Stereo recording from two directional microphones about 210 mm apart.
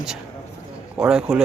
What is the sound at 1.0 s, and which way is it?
Speech, 5° right (ahead or behind).